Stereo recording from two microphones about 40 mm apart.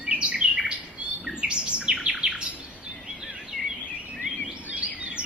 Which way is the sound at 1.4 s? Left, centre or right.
Right.